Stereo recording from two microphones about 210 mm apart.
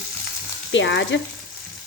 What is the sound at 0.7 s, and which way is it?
Speech, 60° left (ahead or behind).